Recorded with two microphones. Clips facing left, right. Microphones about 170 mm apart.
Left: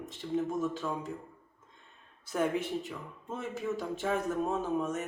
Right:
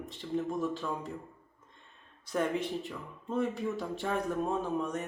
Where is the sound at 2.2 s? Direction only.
5° left (ahead or behind).